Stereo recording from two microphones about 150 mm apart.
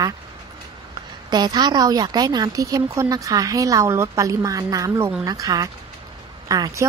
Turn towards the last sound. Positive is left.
turn(degrees=-25)  # may be behind; listen again after turning